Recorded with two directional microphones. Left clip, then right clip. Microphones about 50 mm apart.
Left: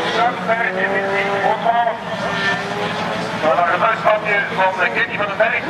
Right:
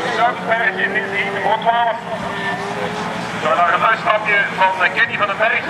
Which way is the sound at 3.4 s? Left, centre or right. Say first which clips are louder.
Right 1 dB; right.